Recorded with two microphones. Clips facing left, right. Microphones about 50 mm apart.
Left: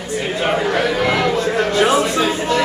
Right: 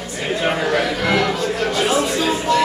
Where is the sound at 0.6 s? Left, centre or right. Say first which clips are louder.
Left 2 dB; left.